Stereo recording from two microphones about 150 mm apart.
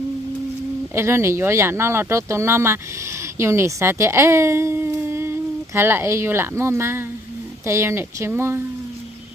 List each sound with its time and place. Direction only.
0.9 s speech: 20° right (ahead or behind)